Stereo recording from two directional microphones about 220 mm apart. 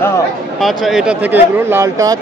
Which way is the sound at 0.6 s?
Centre (ahead or behind).